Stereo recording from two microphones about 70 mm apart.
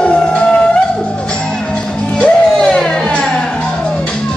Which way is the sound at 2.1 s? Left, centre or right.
Centre.